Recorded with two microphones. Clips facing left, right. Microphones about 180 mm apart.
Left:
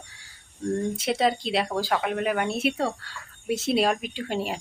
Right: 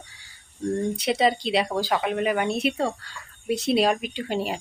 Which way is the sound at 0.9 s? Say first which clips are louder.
Right 2 dB; centre (ahead or behind).